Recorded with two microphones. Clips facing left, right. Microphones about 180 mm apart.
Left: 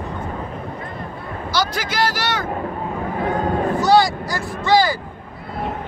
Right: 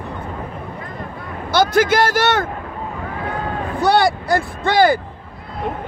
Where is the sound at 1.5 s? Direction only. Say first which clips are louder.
Right 9 dB; 50° right (ahead or behind).